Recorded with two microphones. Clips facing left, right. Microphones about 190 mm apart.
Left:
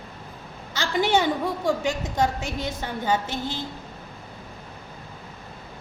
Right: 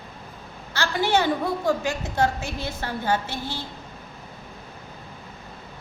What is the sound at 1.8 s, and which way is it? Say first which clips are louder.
A woman's voice: even; 20° left (ahead or behind).